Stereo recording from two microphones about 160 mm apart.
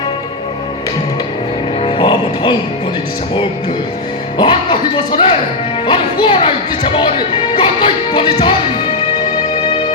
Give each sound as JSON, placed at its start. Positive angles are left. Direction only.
{"t": 1.8, "sound": "music", "side_deg": 30}
{"t": 4.4, "sound": "speech", "side_deg": 30}